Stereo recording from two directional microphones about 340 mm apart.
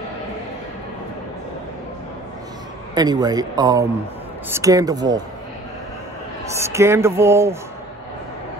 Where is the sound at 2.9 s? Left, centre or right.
Centre.